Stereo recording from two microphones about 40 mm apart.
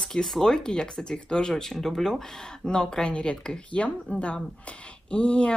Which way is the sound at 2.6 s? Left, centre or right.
Centre.